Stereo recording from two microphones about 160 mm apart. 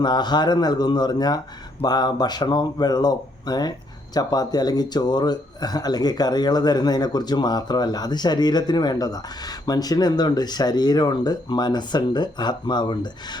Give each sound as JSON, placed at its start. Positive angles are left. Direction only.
{"t": 0.0, "sound": "speech", "side_deg": 25}